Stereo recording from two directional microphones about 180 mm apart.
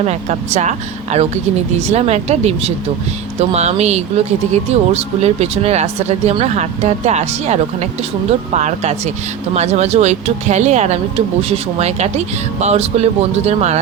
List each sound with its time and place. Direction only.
0.0 s speech: 40° right (ahead or behind)